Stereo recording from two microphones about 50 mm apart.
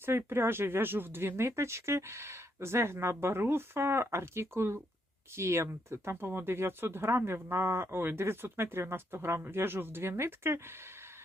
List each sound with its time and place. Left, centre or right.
0.0 s speech: right